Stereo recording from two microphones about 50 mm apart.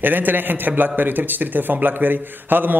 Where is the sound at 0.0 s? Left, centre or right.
Right.